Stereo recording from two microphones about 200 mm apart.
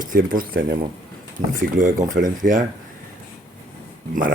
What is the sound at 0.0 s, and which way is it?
Speech, 45° right (ahead or behind).